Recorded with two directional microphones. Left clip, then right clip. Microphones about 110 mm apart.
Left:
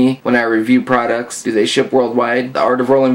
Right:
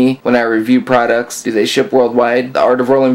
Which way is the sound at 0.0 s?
30° right (ahead or behind).